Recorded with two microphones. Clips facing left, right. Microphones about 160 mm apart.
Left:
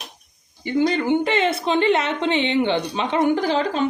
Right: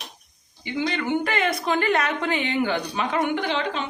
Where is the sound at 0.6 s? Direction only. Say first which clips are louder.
Left 6 dB; 40° left (ahead or behind).